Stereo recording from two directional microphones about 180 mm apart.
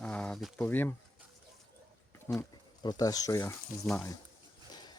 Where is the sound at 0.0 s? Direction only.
5° left (ahead or behind).